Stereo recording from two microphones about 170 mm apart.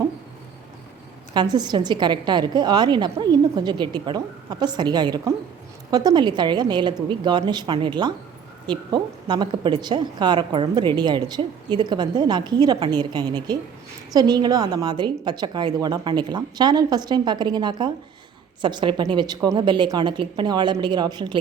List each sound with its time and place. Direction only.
1.3 s a woman's voice: 25° right (ahead or behind)